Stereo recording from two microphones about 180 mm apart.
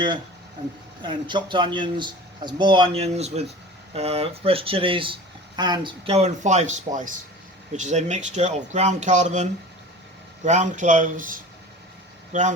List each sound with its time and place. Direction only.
1.0 s speech: 25° right (ahead or behind); by 12.5 s 40° right (ahead or behind)